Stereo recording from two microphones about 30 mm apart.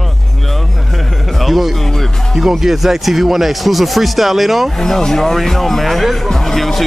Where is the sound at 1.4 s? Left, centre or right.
Centre.